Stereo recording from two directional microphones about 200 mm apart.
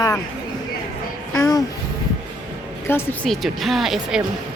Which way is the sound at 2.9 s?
5° left (ahead or behind).